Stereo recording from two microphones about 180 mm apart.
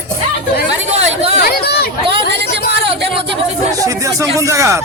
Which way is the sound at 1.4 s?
60° left (ahead or behind).